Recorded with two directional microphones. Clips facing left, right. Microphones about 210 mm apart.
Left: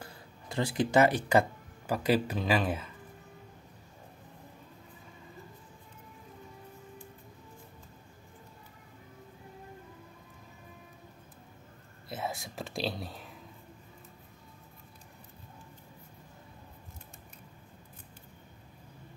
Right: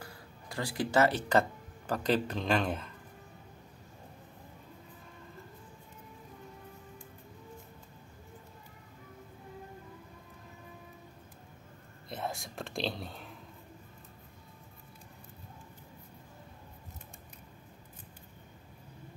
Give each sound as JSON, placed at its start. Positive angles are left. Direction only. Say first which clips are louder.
{"t": 0.0, "sound": "speech", "louder": "left 1 dB", "side_deg": 25}
{"t": 12.1, "sound": "whispering", "louder": "left 1 dB", "side_deg": 5}